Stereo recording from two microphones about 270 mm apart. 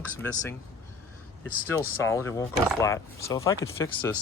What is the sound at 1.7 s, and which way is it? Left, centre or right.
Speech, centre.